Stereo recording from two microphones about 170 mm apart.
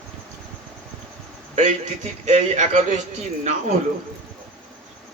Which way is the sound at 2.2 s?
45° right (ahead or behind).